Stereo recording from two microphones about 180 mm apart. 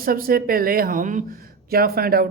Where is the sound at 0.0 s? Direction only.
55° right (ahead or behind).